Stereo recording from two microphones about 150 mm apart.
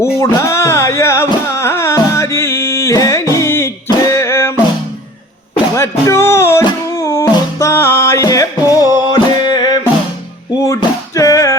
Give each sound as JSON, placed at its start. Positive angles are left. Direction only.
{"t": 0.2, "sound": "music", "side_deg": 20}
{"t": 5.7, "sound": "music", "side_deg": 20}
{"t": 10.8, "sound": "music", "side_deg": 20}